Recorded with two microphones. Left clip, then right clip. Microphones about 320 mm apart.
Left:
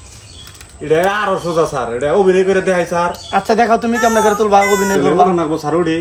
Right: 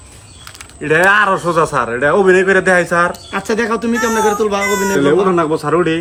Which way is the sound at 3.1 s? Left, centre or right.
Centre.